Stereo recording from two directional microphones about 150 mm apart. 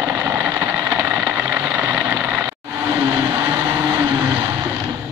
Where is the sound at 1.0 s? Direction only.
10° right (ahead or behind).